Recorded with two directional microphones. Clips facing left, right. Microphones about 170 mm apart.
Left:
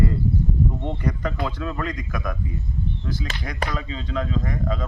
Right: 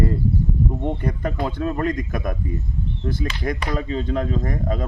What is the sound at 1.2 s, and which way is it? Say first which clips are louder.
Speech: right 3 dB; 45° right (ahead or behind).